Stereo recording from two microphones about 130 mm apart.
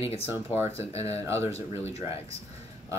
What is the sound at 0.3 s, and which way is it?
Speech, 15° right (ahead or behind).